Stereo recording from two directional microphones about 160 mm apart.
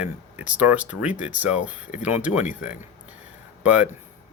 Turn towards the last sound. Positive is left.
turn(degrees=-10)  # may be behind; listen again after turning